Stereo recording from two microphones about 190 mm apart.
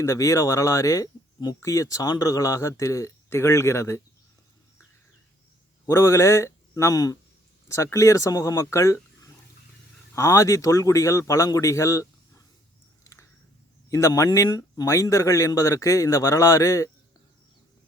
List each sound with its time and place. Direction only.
0.0 s speech: 15° left (ahead or behind)
5.8 s a man's voice: 15° left (ahead or behind)
13.9 s speech: 15° left (ahead or behind)